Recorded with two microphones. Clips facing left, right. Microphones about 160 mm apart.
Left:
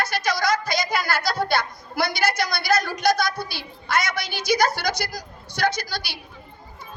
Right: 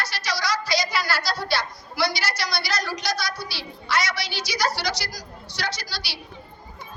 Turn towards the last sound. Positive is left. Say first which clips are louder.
# left 5 dB
turn(degrees=50)  # may be behind; listen again after turning